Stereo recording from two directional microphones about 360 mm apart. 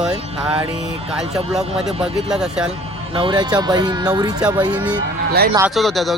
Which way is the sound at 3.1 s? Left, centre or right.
Centre.